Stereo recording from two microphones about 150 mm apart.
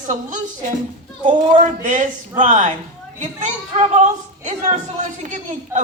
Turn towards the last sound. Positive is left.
turn(degrees=-55)  # may be behind; listen again after turning